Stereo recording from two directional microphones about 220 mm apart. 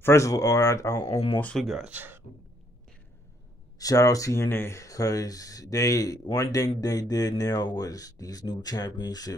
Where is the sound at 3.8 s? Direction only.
15° left (ahead or behind).